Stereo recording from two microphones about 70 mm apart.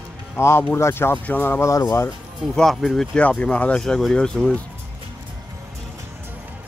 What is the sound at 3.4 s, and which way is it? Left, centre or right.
Speech, centre.